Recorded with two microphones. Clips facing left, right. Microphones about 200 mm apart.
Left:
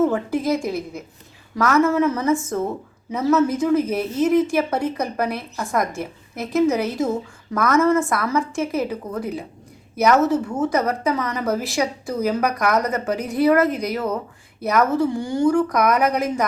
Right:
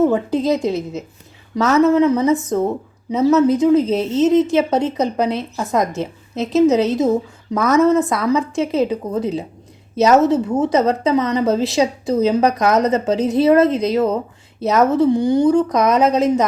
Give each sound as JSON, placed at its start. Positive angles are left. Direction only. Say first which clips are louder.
{"t": 0.0, "sound": "a woman's voice", "louder": "right 4 dB", "side_deg": -20}